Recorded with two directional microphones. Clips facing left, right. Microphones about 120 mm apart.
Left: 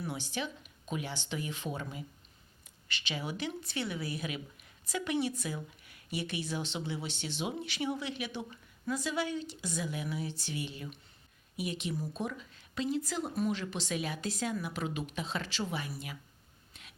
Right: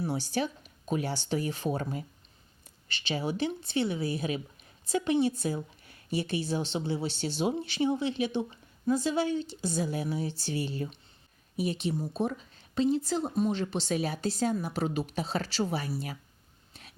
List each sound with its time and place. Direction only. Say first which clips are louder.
0.0 s speech: right 7 dB; 35° right (ahead or behind)
2.9 s speech: right 6 dB; 30° right (ahead or behind)
16.7 s a sound: right 4 dB; 35° right (ahead or behind)